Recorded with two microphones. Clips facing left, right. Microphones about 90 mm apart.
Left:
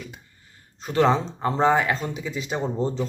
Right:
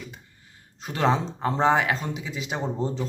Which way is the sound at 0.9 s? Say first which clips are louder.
Left 3 dB; 15° right (ahead or behind).